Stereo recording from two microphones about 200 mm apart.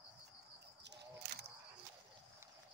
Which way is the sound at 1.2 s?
55° right (ahead or behind).